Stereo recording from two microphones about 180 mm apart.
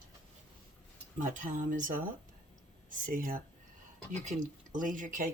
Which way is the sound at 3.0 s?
50° right (ahead or behind).